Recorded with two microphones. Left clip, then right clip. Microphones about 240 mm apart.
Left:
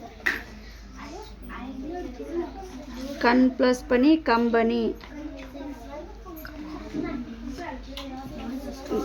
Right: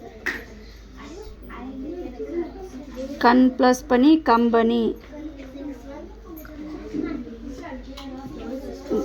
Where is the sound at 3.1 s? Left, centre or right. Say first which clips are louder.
Right 4 dB; centre.